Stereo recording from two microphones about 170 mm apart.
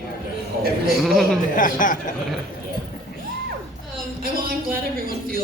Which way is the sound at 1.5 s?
50° left (ahead or behind).